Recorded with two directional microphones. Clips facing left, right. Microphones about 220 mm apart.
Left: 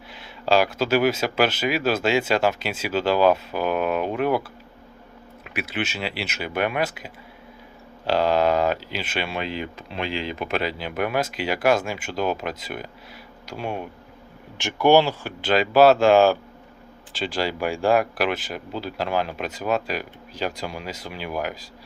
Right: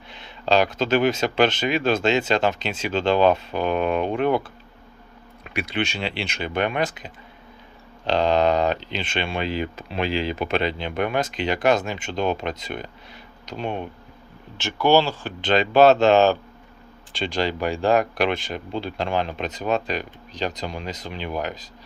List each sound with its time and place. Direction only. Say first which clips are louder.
0.1 s speech: even; 5° left (ahead or behind)
5.5 s speech: right 2 dB; 5° left (ahead or behind)
9.6 s speech: right 4 dB; 40° right (ahead or behind)
10.3 s speech: right 2 dB; centre (ahead or behind)